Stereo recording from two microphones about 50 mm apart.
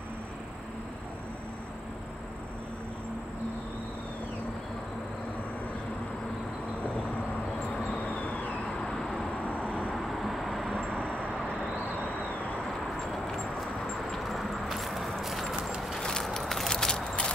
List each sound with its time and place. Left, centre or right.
8.1 s vehicle: left
8.8 s vehicle: centre
9.4 s vehicle: left
9.9 s vehicle: centre
10.9 s vehicle: centre
13.1 s a sound: centre
16.0 s vehicle: centre
16.3 s a sound: centre